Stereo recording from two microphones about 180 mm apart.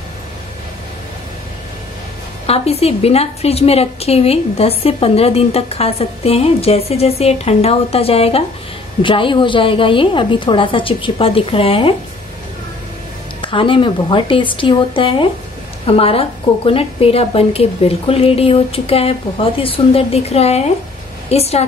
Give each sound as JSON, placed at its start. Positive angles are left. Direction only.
{"t": 2.4, "sound": "a woman's voice", "side_deg": 35}
{"t": 13.4, "sound": "a woman's voice", "side_deg": 30}